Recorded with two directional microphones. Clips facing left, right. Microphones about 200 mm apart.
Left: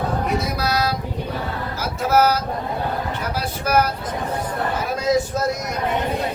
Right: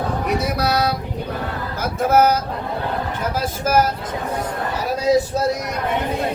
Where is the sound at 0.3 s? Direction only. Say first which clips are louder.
Right 2 dB; 60° right (ahead or behind).